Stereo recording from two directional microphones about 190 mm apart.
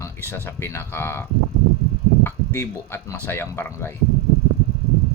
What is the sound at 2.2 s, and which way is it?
Speech, 10° left (ahead or behind).